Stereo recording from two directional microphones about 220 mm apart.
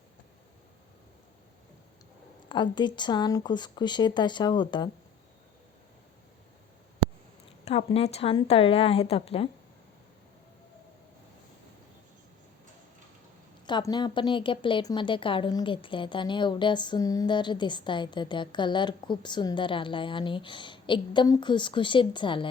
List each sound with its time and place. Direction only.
2.5 s a woman's voice: 20° left (ahead or behind)
7.6 s a woman's voice: 30° left (ahead or behind)
13.7 s a woman's voice: 20° left (ahead or behind)